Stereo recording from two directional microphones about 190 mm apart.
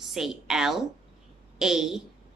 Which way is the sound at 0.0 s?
Centre (ahead or behind).